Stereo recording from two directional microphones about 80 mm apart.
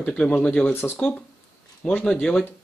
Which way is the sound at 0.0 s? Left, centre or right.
Centre.